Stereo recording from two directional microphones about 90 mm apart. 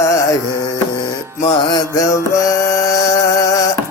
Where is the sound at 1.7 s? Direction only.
35° left (ahead or behind).